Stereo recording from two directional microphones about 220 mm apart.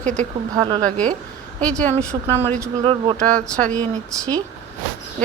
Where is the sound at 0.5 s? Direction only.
20° right (ahead or behind).